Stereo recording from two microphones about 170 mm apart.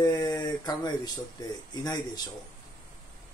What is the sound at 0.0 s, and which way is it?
Speech, 25° left (ahead or behind).